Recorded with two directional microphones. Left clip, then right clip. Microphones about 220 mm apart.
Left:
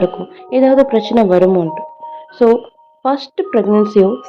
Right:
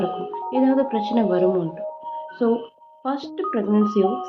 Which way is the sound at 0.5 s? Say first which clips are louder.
Left 11 dB; 25° left (ahead or behind).